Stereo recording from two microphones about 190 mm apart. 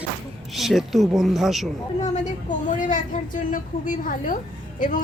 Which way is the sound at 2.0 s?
40° left (ahead or behind).